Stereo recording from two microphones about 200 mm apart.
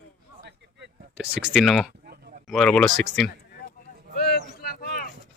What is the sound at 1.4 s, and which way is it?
Speech, centre (ahead or behind).